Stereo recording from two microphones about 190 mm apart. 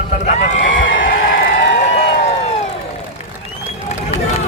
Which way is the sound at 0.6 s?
80° left.